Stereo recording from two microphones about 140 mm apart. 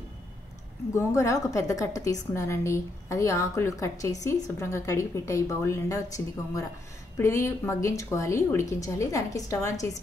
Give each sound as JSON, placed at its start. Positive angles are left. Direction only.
{"t": 0.9, "sound": "a woman's voice", "side_deg": 20}